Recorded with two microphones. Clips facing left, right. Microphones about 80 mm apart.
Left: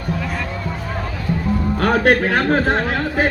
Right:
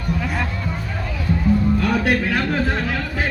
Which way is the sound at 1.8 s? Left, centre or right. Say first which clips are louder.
Left 4 dB; left.